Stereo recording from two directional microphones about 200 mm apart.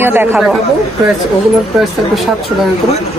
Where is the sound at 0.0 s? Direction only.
10° right (ahead or behind).